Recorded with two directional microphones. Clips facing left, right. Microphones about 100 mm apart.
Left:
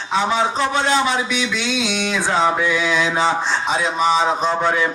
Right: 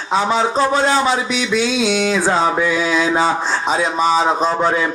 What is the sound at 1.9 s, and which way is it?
Music, 40° right (ahead or behind).